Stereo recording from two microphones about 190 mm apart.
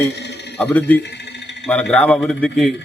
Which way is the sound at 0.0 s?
65° left (ahead or behind).